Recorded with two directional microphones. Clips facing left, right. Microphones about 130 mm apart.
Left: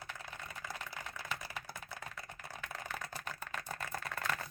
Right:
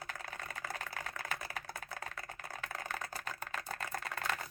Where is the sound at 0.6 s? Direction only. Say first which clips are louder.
Right 2 dB; 55° right (ahead or behind).